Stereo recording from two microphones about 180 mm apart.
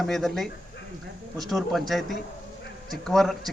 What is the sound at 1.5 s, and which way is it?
A man's voice, centre (ahead or behind).